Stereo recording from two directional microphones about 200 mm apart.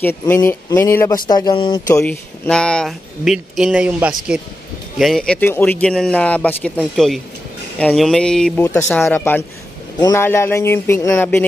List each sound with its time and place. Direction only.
0.0 s speech: 15° left (ahead or behind)
2.0 s speech: 5° left (ahead or behind)